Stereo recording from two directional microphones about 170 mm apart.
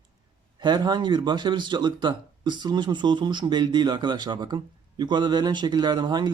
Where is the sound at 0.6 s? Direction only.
25° right (ahead or behind).